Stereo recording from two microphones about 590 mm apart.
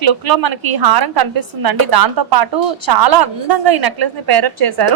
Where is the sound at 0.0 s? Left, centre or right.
Right.